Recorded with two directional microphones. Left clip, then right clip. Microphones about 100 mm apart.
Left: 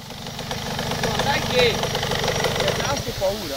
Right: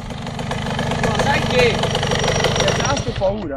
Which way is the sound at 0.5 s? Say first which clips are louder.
Right 4 dB; 25° left (ahead or behind).